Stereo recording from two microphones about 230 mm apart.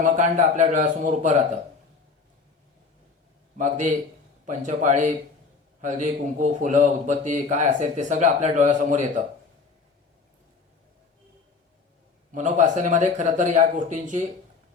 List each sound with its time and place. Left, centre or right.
0.0 s a man's voice: right
3.6 s a man's voice: right
12.3 s a man's voice: right